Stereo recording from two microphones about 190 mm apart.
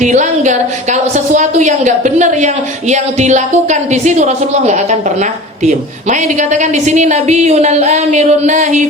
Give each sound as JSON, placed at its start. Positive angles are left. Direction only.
{"t": 0.0, "sound": "a sound", "side_deg": -40}
{"t": 2.9, "sound": "speech", "side_deg": -40}
{"t": 6.1, "sound": "speech", "side_deg": -40}